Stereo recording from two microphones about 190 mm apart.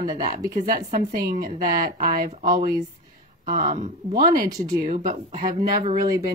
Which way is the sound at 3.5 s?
40° right (ahead or behind).